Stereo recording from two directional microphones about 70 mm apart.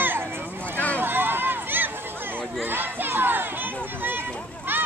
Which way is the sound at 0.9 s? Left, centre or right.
Right.